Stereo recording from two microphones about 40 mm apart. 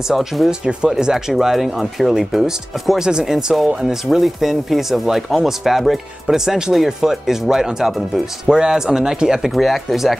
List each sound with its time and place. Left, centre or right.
0.1 s speech: centre
0.5 s speech: right
1.3 s speech: centre
9.5 s speech: centre